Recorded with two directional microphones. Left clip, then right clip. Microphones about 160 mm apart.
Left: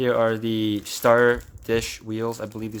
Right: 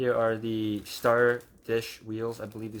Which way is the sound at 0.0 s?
30° left (ahead or behind).